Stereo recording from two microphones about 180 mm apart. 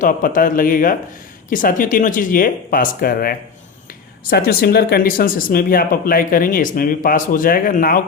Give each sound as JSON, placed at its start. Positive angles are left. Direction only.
{"t": 0.0, "sound": "speech", "side_deg": 50}